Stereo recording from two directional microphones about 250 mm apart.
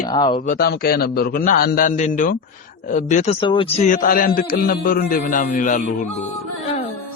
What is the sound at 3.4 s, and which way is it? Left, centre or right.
A man's voice, centre.